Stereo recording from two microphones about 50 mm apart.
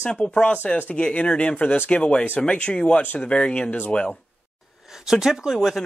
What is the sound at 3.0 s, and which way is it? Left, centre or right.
Speech, left.